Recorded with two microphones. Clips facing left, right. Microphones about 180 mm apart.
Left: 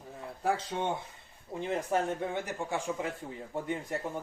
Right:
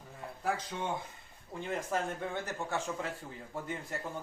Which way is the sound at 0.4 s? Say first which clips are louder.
Left 4 dB; 30° left (ahead or behind).